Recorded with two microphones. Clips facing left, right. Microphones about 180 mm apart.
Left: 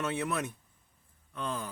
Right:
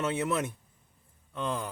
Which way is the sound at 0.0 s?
20° right (ahead or behind).